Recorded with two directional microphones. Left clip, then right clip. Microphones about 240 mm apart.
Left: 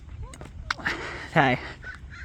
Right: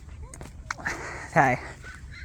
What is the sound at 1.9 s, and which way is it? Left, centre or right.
Crow, right.